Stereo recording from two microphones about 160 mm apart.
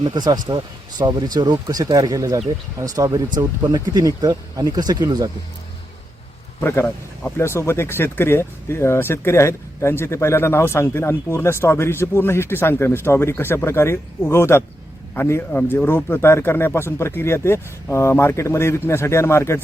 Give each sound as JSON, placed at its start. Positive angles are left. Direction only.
{"t": 0.0, "sound": "speech", "side_deg": -25}
{"t": 6.6, "sound": "speech", "side_deg": 15}